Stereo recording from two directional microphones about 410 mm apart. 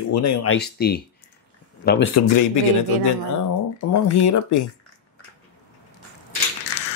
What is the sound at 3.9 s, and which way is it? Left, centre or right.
Speech, left.